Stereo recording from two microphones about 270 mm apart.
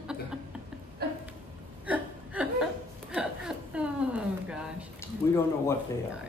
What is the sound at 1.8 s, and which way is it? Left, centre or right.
Chuckle, centre.